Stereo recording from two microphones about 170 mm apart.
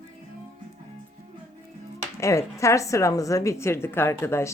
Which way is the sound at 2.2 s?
20° left (ahead or behind).